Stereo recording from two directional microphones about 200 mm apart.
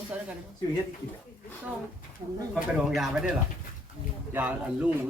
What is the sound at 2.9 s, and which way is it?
Speech, centre (ahead or behind).